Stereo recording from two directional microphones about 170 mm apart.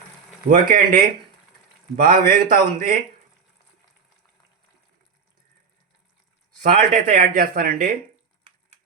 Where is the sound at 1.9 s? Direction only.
50° right (ahead or behind).